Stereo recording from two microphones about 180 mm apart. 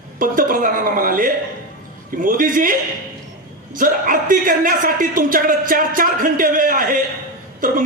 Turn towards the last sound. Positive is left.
turn(degrees=-50)  # may be behind; listen again after turning